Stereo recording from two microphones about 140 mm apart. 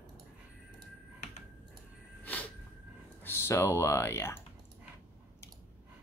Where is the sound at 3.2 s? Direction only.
15° left (ahead or behind).